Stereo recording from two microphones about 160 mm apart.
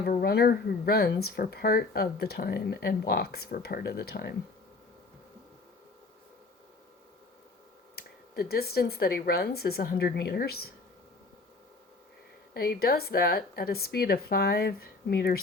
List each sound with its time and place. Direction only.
0.0 s speech: 75° left (ahead or behind)
7.9 s speech: 75° left (ahead or behind)
12.5 s speech: 75° left (ahead or behind)